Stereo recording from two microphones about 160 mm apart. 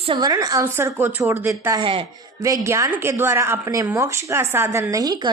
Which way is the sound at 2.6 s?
15° right (ahead or behind).